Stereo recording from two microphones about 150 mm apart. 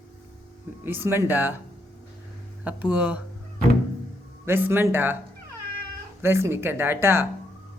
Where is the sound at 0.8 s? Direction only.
15° right (ahead or behind).